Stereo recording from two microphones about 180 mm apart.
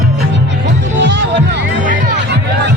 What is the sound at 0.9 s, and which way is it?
Music, 85° right.